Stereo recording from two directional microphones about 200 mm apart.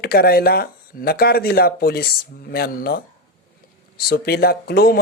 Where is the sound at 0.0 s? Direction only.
50° left (ahead or behind).